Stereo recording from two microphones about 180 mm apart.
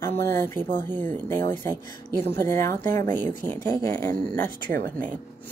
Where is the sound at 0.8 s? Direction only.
10° left (ahead or behind).